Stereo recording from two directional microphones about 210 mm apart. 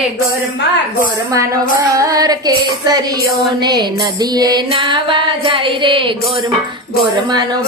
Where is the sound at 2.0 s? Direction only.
15° right (ahead or behind).